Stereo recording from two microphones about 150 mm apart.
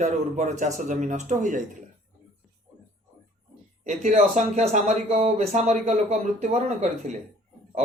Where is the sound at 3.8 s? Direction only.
50° right (ahead or behind).